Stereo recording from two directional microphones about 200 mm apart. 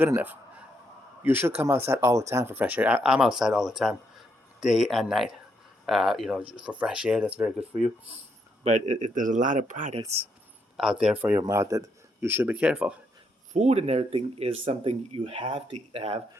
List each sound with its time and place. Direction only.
0.0 s a man's voice: 10° right (ahead or behind)
8.6 s speech: 40° right (ahead or behind)
10.0 s a man's voice: 15° right (ahead or behind)
10.8 s a man's voice: 5° right (ahead or behind)
13.5 s speech: 35° right (ahead or behind)